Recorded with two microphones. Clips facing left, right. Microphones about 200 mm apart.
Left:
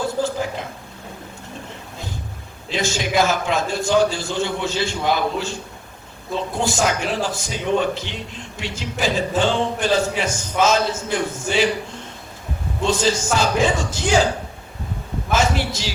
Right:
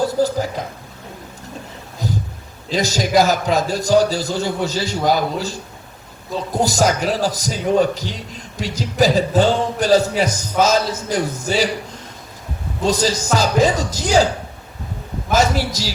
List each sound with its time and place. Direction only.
0.0 s a woman's voice: 40° right (ahead or behind)
2.0 s a sound: 40° right (ahead or behind)
2.6 s a man's voice: 40° right (ahead or behind)
12.8 s a man's voice: 40° right (ahead or behind)
15.3 s a man's voice: 40° right (ahead or behind)